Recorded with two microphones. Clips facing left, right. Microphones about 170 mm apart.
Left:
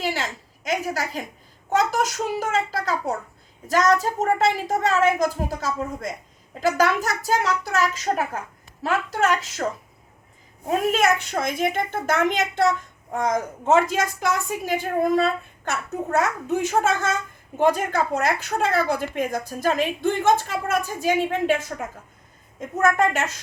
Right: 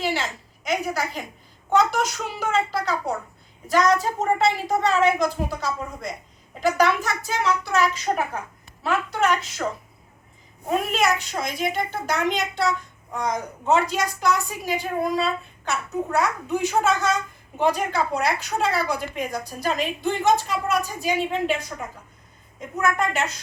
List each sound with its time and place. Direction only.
0.0 s a sound: 45° left (ahead or behind)
1.7 s a woman's voice: 40° left (ahead or behind)
10.9 s a woman's voice: 50° left (ahead or behind)
22.8 s a woman's voice: 45° left (ahead or behind)